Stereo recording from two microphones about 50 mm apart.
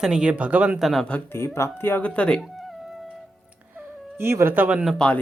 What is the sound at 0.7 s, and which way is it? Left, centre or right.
Speech, centre.